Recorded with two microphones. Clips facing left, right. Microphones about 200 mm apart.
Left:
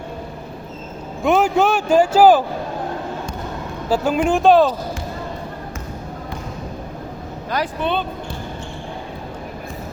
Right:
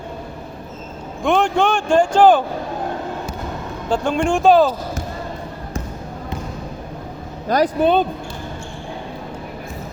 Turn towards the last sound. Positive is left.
turn(degrees=-40)  # may be behind; listen again after turning